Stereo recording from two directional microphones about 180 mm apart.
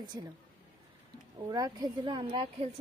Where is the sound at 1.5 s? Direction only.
20° right (ahead or behind).